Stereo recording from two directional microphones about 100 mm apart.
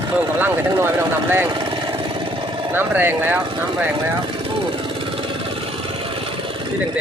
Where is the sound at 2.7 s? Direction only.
20° right (ahead or behind).